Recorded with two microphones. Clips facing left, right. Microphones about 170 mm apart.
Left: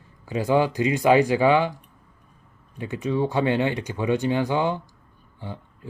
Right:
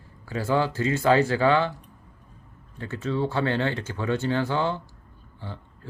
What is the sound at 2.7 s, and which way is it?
Speech, 15° left (ahead or behind).